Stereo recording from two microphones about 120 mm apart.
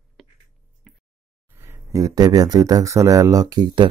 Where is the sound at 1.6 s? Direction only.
25° right (ahead or behind).